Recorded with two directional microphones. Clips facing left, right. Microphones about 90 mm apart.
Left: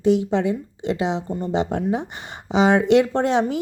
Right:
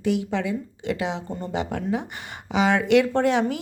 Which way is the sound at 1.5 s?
25° left (ahead or behind).